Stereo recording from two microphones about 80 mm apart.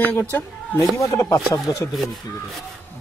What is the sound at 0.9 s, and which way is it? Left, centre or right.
Speech, left.